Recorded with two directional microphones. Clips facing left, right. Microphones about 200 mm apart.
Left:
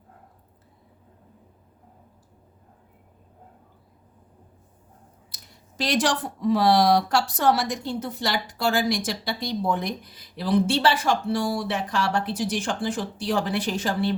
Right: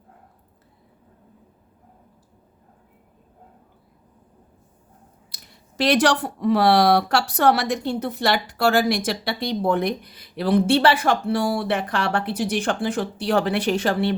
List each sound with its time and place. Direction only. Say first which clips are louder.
5.3 s speech: right 1 dB; 65° right (ahead or behind)